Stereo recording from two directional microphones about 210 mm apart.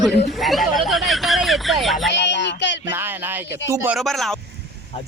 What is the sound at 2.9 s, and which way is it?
Speech, 10° right (ahead or behind).